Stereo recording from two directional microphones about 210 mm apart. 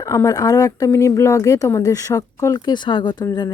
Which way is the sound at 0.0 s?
15° left (ahead or behind).